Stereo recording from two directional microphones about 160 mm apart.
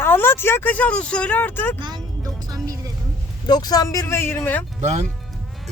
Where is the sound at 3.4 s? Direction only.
25° left (ahead or behind).